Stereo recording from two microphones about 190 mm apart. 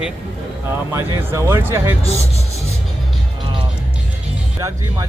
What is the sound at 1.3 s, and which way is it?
Speech, 15° right (ahead or behind).